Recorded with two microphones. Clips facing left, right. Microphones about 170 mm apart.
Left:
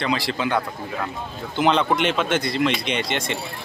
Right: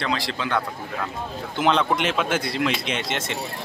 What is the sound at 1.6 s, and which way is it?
Speech, centre (ahead or behind).